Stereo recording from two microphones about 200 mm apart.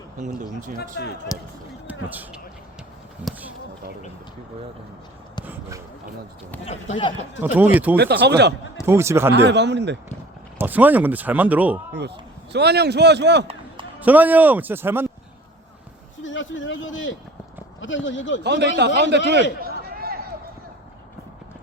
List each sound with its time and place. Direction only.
1.3 s speech: 15° left (ahead or behind)
1.9 s speech: 10° right (ahead or behind)
7.4 s speech: 10° right (ahead or behind)
7.9 s a man's voice: 55° right (ahead or behind)
8.9 s speech: 15° right (ahead or behind)
9.3 s a man's voice: 60° right (ahead or behind)
10.6 s speech: 10° right (ahead or behind)
12.5 s a man's voice: 55° right (ahead or behind)
14.0 s speech: 10° right (ahead or behind)
16.2 s speech: 75° left (ahead or behind)
18.4 s a man's voice: 60° right (ahead or behind)
19.6 s a sound: 50° right (ahead or behind)